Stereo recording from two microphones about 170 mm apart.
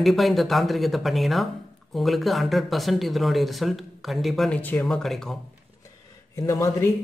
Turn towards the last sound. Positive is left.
turn(degrees=20)  # may be behind; listen again after turning